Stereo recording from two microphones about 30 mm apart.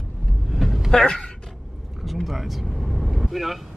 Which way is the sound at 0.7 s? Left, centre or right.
Centre.